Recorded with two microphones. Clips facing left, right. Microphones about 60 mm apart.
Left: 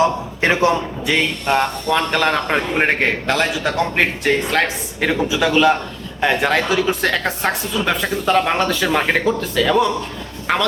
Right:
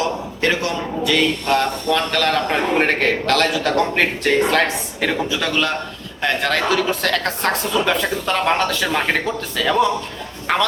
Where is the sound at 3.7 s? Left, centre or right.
Centre.